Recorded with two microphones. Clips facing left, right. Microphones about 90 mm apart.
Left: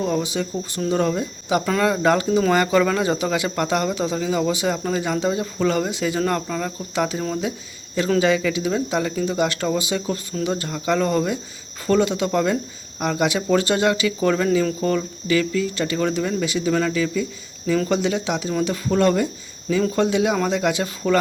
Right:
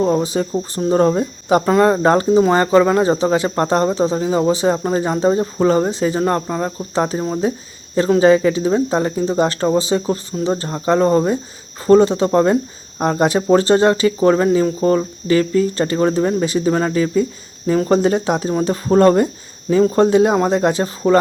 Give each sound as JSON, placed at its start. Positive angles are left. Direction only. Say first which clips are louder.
{"t": 0.0, "sound": "speech", "louder": "right 6 dB", "side_deg": -35}